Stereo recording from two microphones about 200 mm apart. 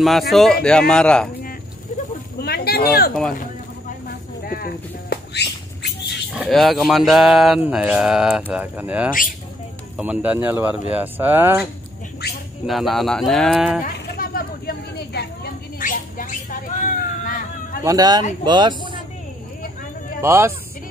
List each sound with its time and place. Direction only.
0.3 s mantra: centre (ahead or behind)
2.4 s speech: 50° left (ahead or behind)
5.1 s a sound: 55° left (ahead or behind)
6.3 s mantra: centre (ahead or behind)
9.9 s speech: 5° right (ahead or behind)
12.6 s mantra: centre (ahead or behind)
13.8 s a sound: 45° left (ahead or behind)
17.8 s speech: 20° right (ahead or behind)
20.2 s speech: 10° right (ahead or behind)